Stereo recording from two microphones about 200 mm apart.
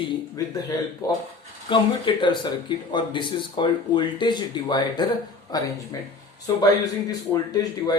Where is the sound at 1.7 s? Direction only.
25° left (ahead or behind).